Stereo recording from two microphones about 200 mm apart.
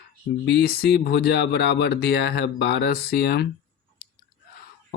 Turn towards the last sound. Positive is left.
turn(degrees=55)  # may be behind; listen again after turning